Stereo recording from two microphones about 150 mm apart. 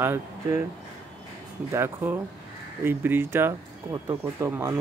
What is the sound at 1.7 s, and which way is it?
Speech, 15° right (ahead or behind).